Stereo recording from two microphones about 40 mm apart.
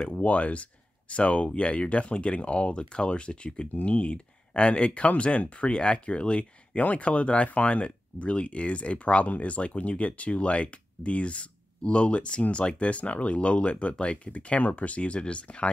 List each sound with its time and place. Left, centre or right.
0.0 s speech: left